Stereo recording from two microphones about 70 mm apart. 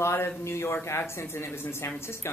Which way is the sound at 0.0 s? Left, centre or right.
Left.